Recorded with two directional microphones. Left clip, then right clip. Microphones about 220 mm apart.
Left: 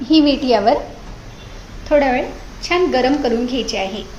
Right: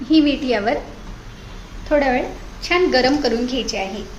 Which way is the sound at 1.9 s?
Centre (ahead or behind).